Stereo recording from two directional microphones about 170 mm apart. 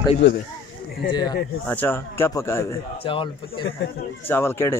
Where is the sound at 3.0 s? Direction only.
30° left (ahead or behind).